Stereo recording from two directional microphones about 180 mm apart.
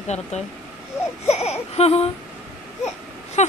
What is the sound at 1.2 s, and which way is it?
Speech, 35° left (ahead or behind).